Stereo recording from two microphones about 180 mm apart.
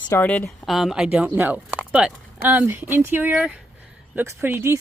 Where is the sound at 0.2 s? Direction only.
10° left (ahead or behind).